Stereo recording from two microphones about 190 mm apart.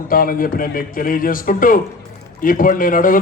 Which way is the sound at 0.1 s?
50° left (ahead or behind).